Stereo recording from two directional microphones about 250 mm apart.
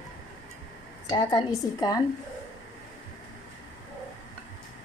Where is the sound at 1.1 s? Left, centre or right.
Centre.